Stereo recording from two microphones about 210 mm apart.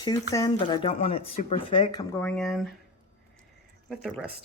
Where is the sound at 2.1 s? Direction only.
10° left (ahead or behind).